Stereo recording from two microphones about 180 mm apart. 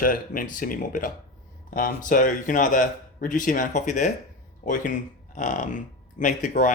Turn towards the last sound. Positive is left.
turn(degrees=45)  # may be behind; listen again after turning